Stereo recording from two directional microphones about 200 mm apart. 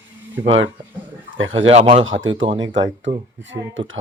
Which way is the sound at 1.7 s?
30° right (ahead or behind).